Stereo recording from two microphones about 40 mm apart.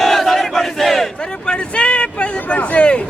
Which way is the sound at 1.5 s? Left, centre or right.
Left.